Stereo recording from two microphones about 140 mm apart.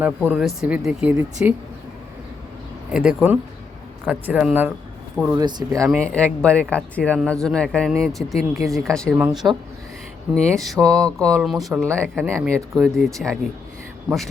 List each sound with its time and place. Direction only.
0.0 s speech: 10° right (ahead or behind)
2.9 s speech: 5° right (ahead or behind)
5.3 s speech: 30° right (ahead or behind)
5.9 s speech: 10° left (ahead or behind)
9.1 s speech: 10° right (ahead or behind)
10.4 s speech: centre (ahead or behind)